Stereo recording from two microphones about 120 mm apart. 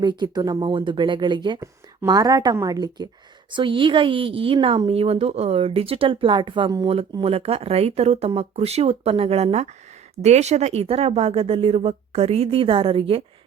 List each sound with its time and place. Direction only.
0.0 s speech: 35° right (ahead or behind)
3.5 s speech: 45° right (ahead or behind)
7.2 s speech: 55° right (ahead or behind)